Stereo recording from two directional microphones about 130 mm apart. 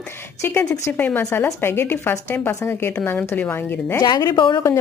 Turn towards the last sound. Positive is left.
turn(degrees=35)  # may be behind; listen again after turning